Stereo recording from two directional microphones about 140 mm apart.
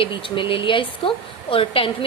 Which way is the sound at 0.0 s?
40° left (ahead or behind).